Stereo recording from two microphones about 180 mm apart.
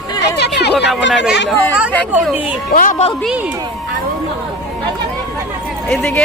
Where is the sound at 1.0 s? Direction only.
85° left.